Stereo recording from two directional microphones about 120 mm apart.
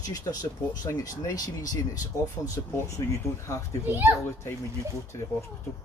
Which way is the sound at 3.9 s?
15° right (ahead or behind).